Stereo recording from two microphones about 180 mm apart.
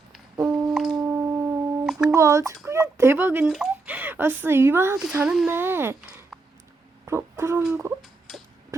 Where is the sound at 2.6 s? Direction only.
15° right (ahead or behind).